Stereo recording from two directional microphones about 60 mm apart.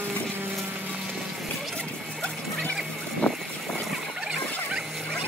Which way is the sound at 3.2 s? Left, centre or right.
Centre.